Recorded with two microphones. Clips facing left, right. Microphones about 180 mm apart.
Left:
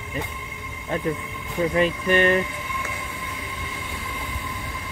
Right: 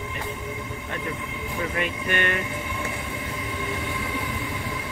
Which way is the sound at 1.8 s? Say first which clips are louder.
Left 8 dB; 35° left (ahead or behind).